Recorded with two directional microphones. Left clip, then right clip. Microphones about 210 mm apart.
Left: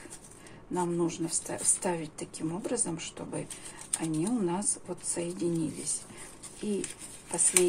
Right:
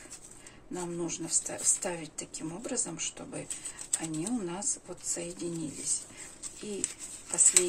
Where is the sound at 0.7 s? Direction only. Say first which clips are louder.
Left 6 dB; centre (ahead or behind).